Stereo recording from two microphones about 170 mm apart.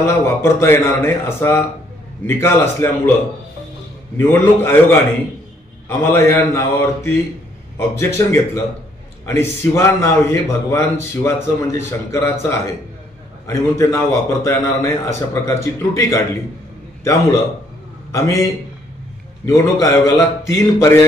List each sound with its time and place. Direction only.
0.0 s a man's voice: 15° left (ahead or behind)
4.2 s a man's voice: 15° left (ahead or behind)
19.4 s a man's voice: 15° left (ahead or behind)